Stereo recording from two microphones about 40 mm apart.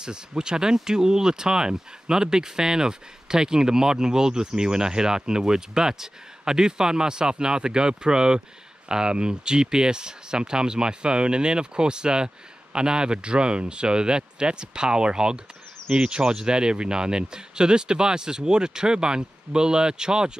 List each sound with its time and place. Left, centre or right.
0.0 s speech: right